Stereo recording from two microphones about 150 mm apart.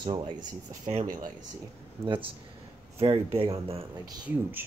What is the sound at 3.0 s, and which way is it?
Speech, 40° right (ahead or behind).